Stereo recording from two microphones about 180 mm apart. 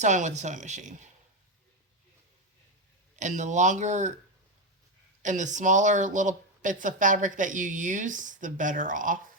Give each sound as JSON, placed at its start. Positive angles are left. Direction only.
{"t": 0.0, "sound": "speech", "side_deg": -40}
{"t": 3.2, "sound": "speech", "side_deg": -40}
{"t": 5.2, "sound": "speech", "side_deg": -45}